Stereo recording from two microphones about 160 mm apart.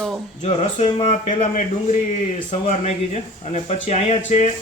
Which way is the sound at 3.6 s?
45° left (ahead or behind).